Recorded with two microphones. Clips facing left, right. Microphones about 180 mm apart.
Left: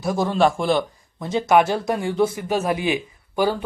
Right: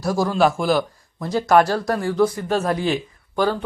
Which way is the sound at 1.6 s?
20° left (ahead or behind).